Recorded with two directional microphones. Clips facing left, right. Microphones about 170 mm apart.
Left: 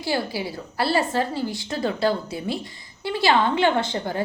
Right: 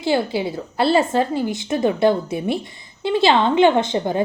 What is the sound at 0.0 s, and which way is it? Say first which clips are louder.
A woman's voice: right 6 dB; 20° right (ahead or behind).